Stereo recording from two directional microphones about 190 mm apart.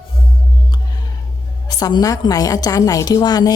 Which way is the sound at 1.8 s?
20° left (ahead or behind).